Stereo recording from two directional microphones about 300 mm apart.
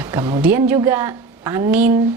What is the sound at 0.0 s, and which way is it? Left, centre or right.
Speech, centre.